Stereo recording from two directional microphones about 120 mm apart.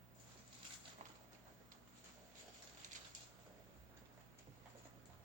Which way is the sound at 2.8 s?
90° right.